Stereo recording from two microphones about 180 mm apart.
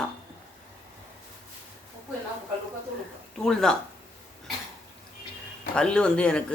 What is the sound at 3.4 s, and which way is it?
Speech, 5° left (ahead or behind).